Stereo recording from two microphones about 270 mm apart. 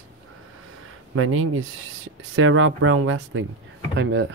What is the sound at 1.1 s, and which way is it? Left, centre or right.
Speech, right.